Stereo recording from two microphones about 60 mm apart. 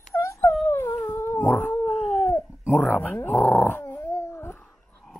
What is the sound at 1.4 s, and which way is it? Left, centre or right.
Howl, left.